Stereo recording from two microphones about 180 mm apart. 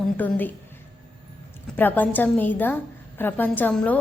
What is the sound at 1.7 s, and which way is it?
A woman's voice, 10° left (ahead or behind).